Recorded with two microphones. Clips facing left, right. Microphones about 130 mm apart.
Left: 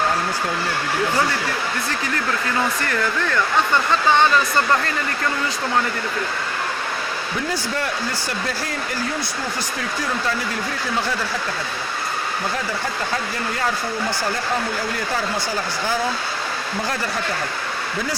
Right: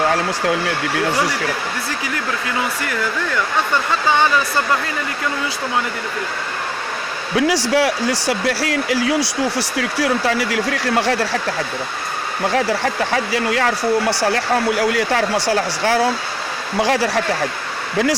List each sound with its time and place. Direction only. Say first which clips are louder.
1.1 s speech: right 1 dB; 10° right (ahead or behind)
2.8 s speech: even; 5° right (ahead or behind)
7.3 s speech: right 11 dB; 90° right
12.5 s speech: right 7 dB; 85° right